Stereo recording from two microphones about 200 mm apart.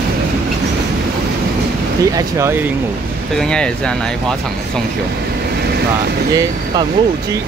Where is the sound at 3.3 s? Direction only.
5° left (ahead or behind).